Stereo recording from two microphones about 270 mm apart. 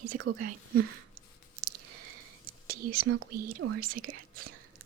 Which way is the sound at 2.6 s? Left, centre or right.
Right.